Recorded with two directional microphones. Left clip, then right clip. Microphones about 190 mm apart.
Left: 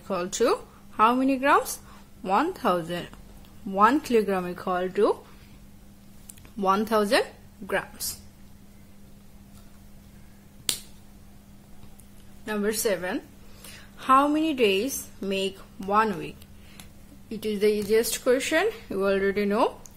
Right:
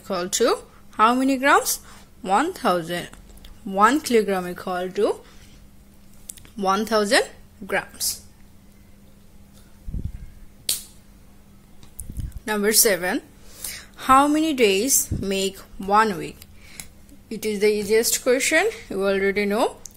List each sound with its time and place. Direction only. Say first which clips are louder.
0.1 s speech: right 3 dB; 5° right (ahead or behind)
6.6 s speech: right 2 dB; 5° right (ahead or behind)
12.4 s a woman's voice: right 6 dB; 20° right (ahead or behind)